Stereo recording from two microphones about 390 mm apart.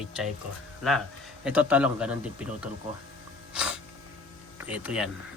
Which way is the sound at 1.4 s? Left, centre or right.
Centre.